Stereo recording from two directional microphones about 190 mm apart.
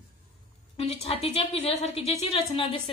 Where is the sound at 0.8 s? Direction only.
30° left (ahead or behind).